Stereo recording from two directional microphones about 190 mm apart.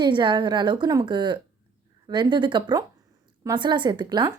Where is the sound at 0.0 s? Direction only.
25° right (ahead or behind).